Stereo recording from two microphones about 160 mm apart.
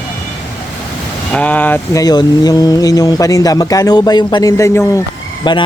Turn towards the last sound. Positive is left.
turn(degrees=30)  # may be behind; listen again after turning